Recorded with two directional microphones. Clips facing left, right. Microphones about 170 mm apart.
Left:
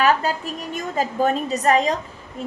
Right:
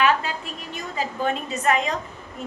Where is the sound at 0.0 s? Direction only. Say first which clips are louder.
Left 3 dB; 40° left (ahead or behind).